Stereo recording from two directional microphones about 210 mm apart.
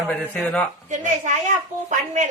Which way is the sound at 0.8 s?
35° right (ahead or behind).